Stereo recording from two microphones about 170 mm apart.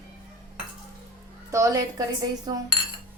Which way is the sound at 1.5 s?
20° right (ahead or behind).